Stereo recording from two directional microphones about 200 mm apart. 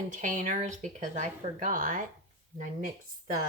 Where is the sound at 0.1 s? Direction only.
40° right (ahead or behind).